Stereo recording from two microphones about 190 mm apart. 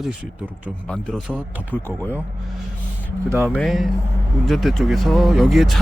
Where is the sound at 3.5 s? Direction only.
5° left (ahead or behind).